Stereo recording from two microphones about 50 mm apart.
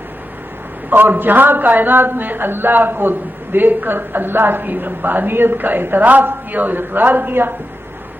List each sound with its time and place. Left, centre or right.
0.9 s a man's voice: right